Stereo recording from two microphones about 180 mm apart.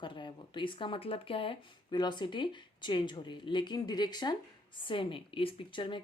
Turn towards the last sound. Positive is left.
turn(degrees=25)  # may be behind; listen again after turning